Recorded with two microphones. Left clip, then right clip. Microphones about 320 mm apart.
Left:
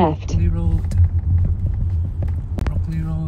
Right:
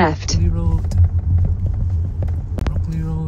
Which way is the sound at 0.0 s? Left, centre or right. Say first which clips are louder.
Right 2 dB; centre.